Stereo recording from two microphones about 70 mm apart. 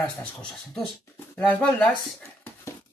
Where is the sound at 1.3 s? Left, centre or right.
Left.